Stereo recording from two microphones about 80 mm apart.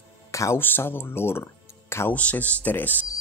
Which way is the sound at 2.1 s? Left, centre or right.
Centre.